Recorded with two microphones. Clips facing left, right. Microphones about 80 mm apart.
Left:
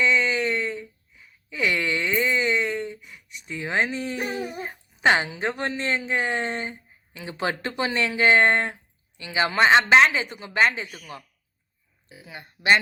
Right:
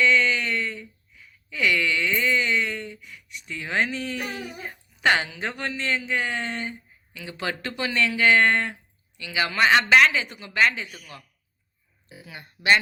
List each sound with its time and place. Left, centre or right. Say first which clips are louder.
0.0 s a sound: right 1 dB; centre
3.5 s speech: left 1 dB; centre
4.2 s a man's voice: left 4 dB; left
6.7 s a sound: right 1 dB; left
7.8 s a man's voice: even; left
10.8 s a man's voice: left 2 dB; centre
12.2 s a man's voice: left 1 dB; left